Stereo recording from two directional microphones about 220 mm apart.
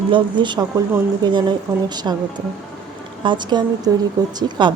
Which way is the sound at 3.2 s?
20° right (ahead or behind).